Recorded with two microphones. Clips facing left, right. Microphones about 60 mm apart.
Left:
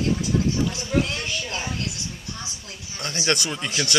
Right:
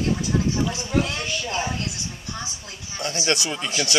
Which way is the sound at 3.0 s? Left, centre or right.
Left.